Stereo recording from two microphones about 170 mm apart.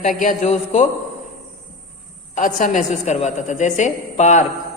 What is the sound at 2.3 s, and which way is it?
A man's voice, 45° left (ahead or behind).